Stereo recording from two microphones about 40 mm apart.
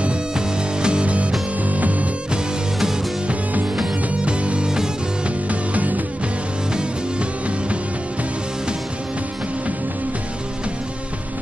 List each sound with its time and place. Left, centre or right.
0.8 s music: right
4.1 s music: right
5.5 s music: right
6.7 s music: right